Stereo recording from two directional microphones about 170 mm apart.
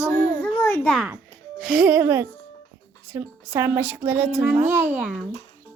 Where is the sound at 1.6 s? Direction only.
Centre (ahead or behind).